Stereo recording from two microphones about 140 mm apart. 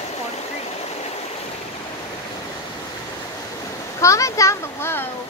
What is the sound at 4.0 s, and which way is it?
Speech, 20° left (ahead or behind).